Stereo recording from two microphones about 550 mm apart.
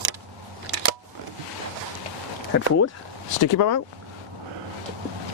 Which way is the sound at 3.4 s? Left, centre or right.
Left.